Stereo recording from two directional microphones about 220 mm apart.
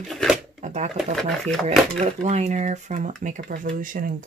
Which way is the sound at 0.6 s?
35° right (ahead or behind).